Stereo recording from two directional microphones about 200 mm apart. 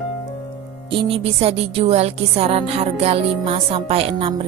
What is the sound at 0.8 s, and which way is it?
A woman's voice, 25° right (ahead or behind).